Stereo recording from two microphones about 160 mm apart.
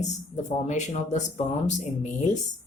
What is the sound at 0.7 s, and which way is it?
Speech, 45° left (ahead or behind).